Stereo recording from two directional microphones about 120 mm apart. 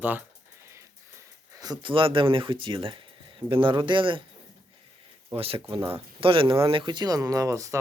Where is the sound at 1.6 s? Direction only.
40° right (ahead or behind).